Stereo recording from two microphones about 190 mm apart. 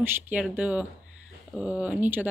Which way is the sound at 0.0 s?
10° right (ahead or behind).